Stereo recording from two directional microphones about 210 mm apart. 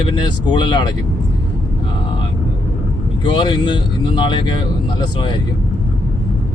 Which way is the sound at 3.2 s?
20° left (ahead or behind).